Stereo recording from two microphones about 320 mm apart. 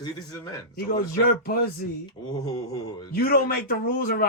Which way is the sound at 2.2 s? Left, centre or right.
Centre.